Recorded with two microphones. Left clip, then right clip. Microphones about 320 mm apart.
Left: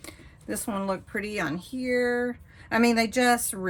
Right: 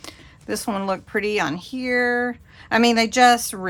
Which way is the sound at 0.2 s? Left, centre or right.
Centre.